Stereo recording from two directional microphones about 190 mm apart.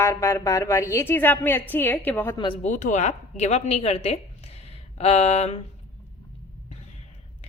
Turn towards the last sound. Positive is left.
turn(degrees=35)  # may be behind; listen again after turning